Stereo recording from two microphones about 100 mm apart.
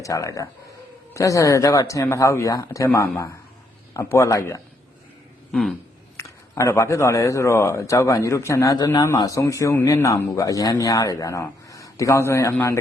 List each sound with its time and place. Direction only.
0.0 s a man's voice: 35° left (ahead or behind)
6.1 s a man's voice: 30° left (ahead or behind)